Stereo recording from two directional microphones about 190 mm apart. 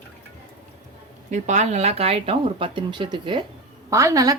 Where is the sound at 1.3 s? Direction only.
40° right (ahead or behind).